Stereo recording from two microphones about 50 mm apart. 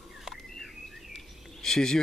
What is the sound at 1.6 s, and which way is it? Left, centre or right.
Speech, centre.